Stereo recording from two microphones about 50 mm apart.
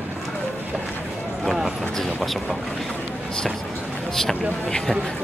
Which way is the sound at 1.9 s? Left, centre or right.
Centre.